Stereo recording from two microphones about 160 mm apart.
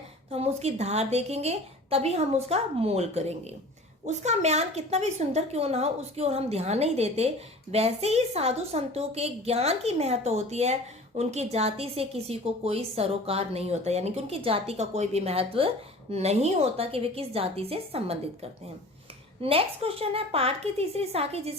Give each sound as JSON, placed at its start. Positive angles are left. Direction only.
{"t": 0.3, "sound": "a woman's voice", "side_deg": -40}
{"t": 19.4, "sound": "a woman's voice", "side_deg": -35}